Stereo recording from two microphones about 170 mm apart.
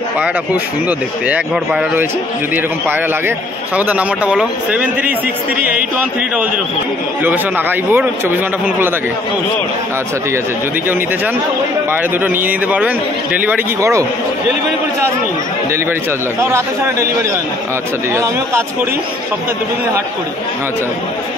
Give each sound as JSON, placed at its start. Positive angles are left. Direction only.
{"t": 0.8, "sound": "a man's voice", "side_deg": -10}
{"t": 7.2, "sound": "a man's voice", "side_deg": -10}
{"t": 12.4, "sound": "a man's voice", "side_deg": -10}
{"t": 16.3, "sound": "a man's voice", "side_deg": -15}